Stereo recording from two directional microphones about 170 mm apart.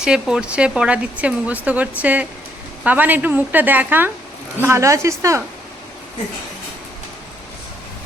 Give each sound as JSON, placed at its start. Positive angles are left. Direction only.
{"t": 0.0, "sound": "speech", "side_deg": -5}